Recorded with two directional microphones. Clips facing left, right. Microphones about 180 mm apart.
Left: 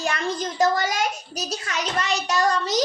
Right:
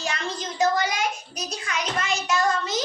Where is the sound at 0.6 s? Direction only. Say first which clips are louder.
Left 1 dB; 45° left (ahead or behind).